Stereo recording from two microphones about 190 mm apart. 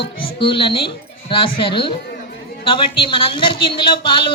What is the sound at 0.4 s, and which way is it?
A man's voice, 25° left (ahead or behind).